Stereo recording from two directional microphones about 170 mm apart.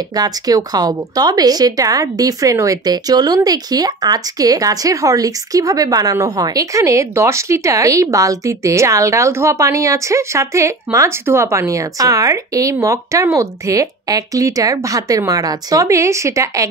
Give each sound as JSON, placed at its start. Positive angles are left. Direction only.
{"t": 0.1, "sound": "a woman's voice", "side_deg": -20}